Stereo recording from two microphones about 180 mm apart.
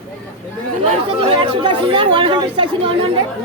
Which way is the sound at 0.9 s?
30° right (ahead or behind).